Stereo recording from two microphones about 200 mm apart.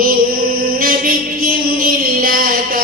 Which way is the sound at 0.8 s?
45° right (ahead or behind).